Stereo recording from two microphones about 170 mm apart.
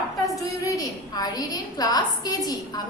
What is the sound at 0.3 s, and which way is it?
A woman's voice, 20° left (ahead or behind).